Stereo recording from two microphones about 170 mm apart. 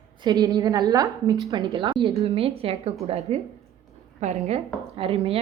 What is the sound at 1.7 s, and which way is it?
A woman's voice, 30° right (ahead or behind).